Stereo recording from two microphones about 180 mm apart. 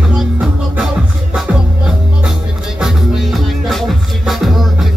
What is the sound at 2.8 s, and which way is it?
Music, centre (ahead or behind).